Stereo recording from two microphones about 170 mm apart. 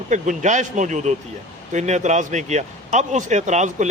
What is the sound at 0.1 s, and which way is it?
A man's voice, 45° right (ahead or behind).